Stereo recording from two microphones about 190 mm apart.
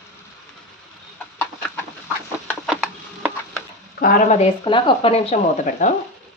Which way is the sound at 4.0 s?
45° left (ahead or behind).